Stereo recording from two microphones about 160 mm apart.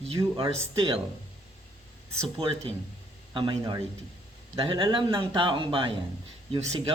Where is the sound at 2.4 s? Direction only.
35° right (ahead or behind).